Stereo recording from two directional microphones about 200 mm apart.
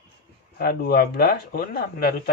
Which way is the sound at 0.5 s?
50° left (ahead or behind).